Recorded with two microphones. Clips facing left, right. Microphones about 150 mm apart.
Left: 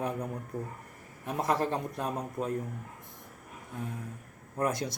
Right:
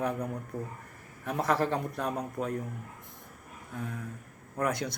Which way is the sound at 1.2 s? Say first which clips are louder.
Right 1 dB; 20° left (ahead or behind).